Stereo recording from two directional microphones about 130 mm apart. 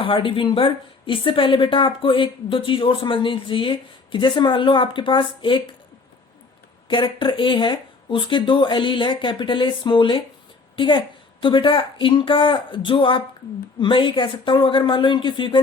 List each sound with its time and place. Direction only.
0.0 s a woman's voice: 40° left (ahead or behind)
6.8 s a woman's voice: 40° left (ahead or behind)